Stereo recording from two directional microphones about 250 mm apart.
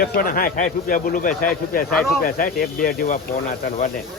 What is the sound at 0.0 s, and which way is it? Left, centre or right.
Speech, left.